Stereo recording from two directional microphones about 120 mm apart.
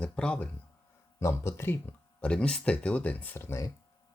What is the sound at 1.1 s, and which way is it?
Speech, 25° left (ahead or behind).